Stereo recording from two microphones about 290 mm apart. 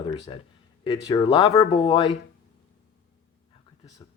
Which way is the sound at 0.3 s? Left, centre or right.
Centre.